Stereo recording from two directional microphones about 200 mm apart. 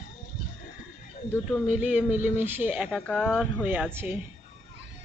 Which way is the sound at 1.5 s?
10° right (ahead or behind).